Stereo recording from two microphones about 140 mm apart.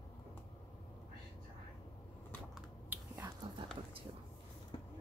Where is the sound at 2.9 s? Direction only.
15° right (ahead or behind).